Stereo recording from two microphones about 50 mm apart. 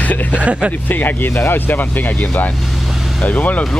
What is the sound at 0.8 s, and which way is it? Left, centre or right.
Speech, left.